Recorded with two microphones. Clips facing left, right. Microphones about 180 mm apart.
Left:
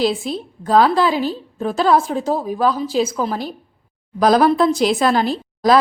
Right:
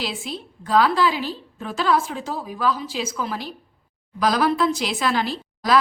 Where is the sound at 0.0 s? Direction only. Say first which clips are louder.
Left 10 dB; 40° left (ahead or behind).